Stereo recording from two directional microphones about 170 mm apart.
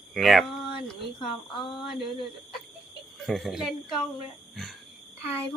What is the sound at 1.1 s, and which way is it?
Speech, 30° left (ahead or behind).